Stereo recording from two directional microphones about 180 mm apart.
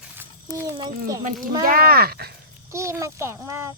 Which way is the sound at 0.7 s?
25° right (ahead or behind).